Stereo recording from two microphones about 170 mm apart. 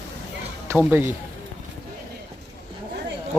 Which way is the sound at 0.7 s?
10° right (ahead or behind).